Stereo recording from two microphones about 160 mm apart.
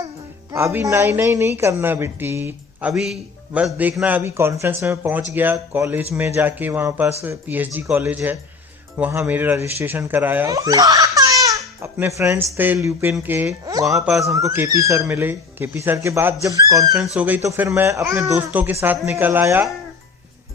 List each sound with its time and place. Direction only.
0.5 s speech: 15° right (ahead or behind)
13.7 s speech: 20° right (ahead or behind)
13.9 s speech: 10° right (ahead or behind)
14.2 s speech: 20° right (ahead or behind)
17.2 s speech: 10° right (ahead or behind)